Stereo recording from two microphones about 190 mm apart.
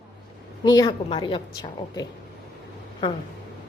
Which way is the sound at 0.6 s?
20° left (ahead or behind).